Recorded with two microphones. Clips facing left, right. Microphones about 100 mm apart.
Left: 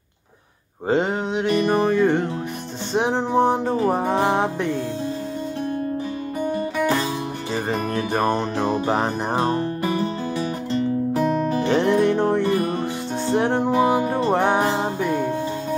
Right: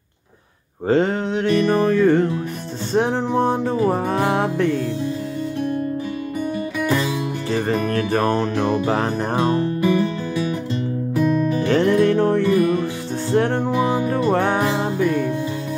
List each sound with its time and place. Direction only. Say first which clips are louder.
0.8 s music: right 3 dB; 10° left (ahead or behind)
3.6 s music: right 1 dB; 30° left (ahead or behind)
6.8 s music: right 1 dB; 35° left (ahead or behind)
7.9 s music: even; 15° left (ahead or behind); by 11.6 s 35° left (ahead or behind)
11.6 s music: right 2 dB; 25° left (ahead or behind)
12.4 s music: right 4 dB; 35° left (ahead or behind)
13.3 s music: right 1 dB; 25° left (ahead or behind)
14.6 s music: right 2 dB; 30° left (ahead or behind)